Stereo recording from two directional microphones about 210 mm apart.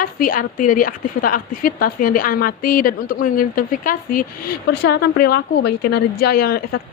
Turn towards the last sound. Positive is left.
turn(degrees=45)  # may be behind; listen again after turning